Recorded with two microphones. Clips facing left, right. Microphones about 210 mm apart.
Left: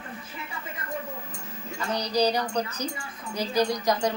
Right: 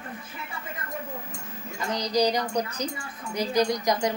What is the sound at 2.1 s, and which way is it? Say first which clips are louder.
A woman's voice: right 1 dB; 15° right (ahead or behind).